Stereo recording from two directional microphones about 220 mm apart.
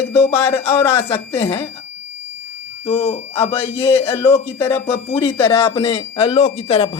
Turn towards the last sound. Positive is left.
turn(degrees=25)  # may be behind; listen again after turning